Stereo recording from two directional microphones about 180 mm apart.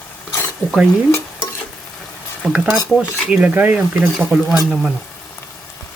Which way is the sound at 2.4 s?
5° right (ahead or behind).